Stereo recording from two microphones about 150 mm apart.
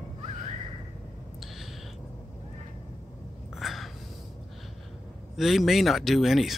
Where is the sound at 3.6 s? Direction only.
Centre (ahead or behind).